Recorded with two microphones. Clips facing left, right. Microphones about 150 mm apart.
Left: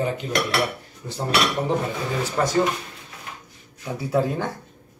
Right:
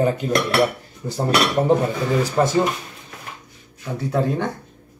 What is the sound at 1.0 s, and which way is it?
Cutlery, 40° right (ahead or behind).